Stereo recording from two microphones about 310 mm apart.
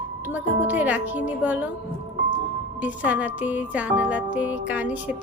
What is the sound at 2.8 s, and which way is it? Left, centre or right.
Speech, centre.